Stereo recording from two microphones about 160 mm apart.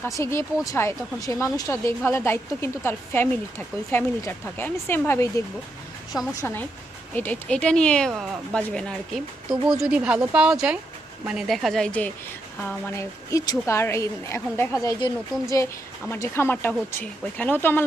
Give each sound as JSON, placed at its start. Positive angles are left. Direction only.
{"t": 0.0, "sound": "speech", "side_deg": 15}
{"t": 6.4, "sound": "speech", "side_deg": 10}